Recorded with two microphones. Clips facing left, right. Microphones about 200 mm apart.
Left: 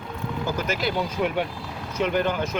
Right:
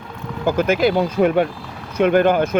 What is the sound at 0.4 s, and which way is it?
Speech, 55° right (ahead or behind).